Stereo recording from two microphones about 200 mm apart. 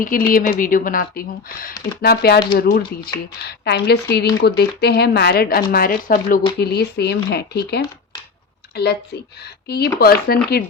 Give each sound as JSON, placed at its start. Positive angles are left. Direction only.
{"t": 0.0, "sound": "a woman's voice", "side_deg": 45}